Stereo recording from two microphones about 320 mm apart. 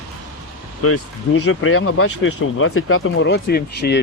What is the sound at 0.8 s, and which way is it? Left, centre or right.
Speech, left.